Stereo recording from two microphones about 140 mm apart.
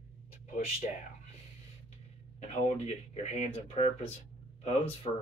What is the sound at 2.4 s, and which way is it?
Speech, 50° left (ahead or behind).